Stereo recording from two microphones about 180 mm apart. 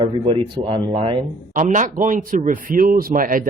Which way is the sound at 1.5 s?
45° right (ahead or behind).